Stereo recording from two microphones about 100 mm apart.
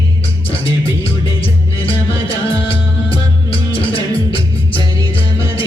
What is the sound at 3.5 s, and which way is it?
Music, 65° left (ahead or behind).